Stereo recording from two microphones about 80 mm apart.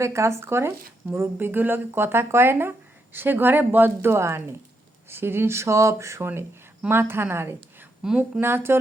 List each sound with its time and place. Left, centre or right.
0.0 s a woman's voice: right